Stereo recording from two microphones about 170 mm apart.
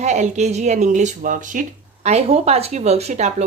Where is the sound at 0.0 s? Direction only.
45° right (ahead or behind).